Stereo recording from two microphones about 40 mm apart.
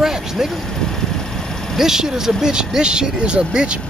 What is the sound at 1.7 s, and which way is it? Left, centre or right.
Speech, centre.